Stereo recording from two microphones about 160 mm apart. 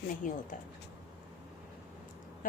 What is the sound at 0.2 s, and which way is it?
Speech, 55° left (ahead or behind).